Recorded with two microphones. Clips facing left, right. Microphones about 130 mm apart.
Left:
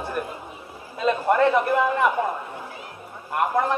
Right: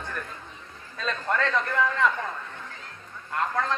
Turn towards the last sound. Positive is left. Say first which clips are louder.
# left 5 dB
turn(degrees=15)  # may be behind; listen again after turning